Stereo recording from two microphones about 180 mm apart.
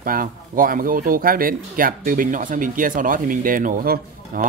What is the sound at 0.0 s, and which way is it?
Speech, 50° right (ahead or behind).